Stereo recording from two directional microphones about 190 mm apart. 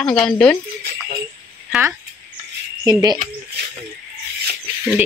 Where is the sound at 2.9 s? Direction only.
20° right (ahead or behind).